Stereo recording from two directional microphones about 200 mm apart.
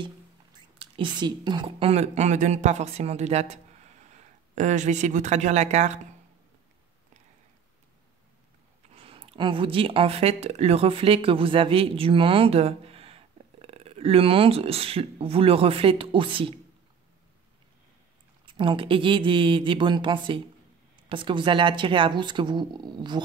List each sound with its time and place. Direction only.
0.0 s speech: 25° right (ahead or behind)
8.9 s speech: 30° right (ahead or behind)
18.4 s speech: 25° right (ahead or behind)